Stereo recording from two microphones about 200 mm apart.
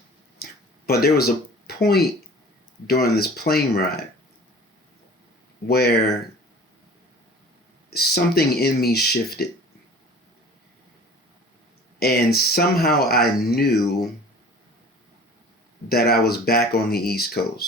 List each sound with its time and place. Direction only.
0.4 s a sound: 50° left (ahead or behind)
0.9 s speech: 50° left (ahead or behind)
5.6 s speech: 50° left (ahead or behind)
7.9 s speech: 50° left (ahead or behind)
11.9 s speech: 50° left (ahead or behind)
15.9 s speech: 50° left (ahead or behind)